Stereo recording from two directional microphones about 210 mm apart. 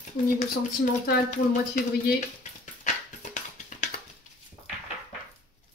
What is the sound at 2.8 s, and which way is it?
Music, 35° left (ahead or behind).